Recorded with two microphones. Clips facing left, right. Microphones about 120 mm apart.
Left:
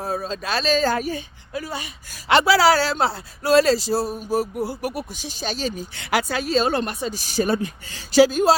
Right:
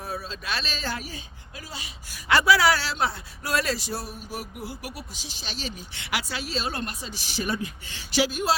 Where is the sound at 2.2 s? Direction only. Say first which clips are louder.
Left 4 dB; 30° left (ahead or behind).